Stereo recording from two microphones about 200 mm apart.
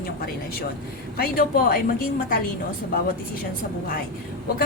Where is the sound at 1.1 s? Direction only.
45° left (ahead or behind).